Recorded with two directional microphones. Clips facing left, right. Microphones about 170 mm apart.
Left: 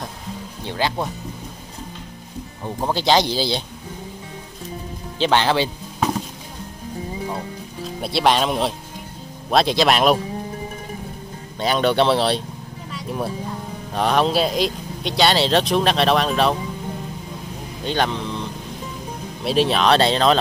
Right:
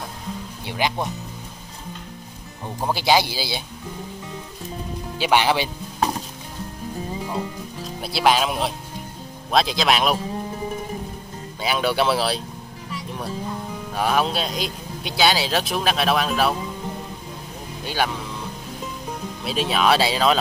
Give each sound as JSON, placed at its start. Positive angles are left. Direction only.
{"t": 0.7, "sound": "speech", "side_deg": -15}
{"t": 2.9, "sound": "speech", "side_deg": -10}
{"t": 5.2, "sound": "speech", "side_deg": -10}
{"t": 8.0, "sound": "speech", "side_deg": 0}
{"t": 11.6, "sound": "speech", "side_deg": -5}
{"t": 13.9, "sound": "speech", "side_deg": -5}
{"t": 17.8, "sound": "speech", "side_deg": -5}
{"t": 19.4, "sound": "speech", "side_deg": 0}